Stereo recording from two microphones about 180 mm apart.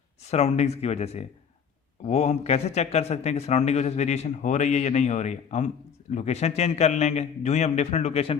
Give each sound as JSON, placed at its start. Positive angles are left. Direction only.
{"t": 0.3, "sound": "speech", "side_deg": 35}